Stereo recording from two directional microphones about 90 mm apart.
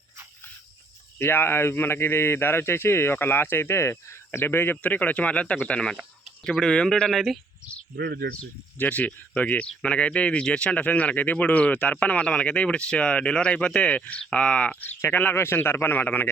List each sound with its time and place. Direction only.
1.2 s a man's voice: 25° left (ahead or behind); by 7.2 s 5° left (ahead or behind)
8.8 s a man's voice: 15° left (ahead or behind)